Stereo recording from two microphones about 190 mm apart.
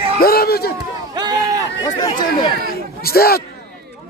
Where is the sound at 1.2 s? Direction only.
20° right (ahead or behind).